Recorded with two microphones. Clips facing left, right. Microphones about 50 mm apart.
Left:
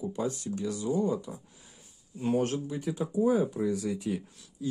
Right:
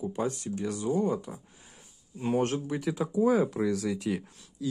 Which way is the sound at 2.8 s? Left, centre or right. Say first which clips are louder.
Right 1 dB; right.